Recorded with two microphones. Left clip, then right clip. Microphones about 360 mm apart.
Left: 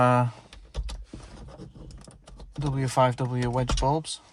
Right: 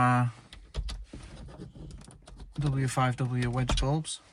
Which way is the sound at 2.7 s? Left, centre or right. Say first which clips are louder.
Left 7 dB; left.